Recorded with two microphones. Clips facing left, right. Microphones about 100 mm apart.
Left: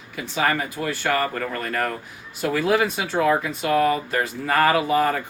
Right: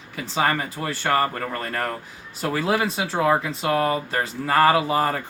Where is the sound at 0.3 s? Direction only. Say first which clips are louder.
Even; 30° right (ahead or behind).